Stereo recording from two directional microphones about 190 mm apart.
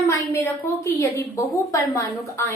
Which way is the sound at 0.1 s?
15° left (ahead or behind).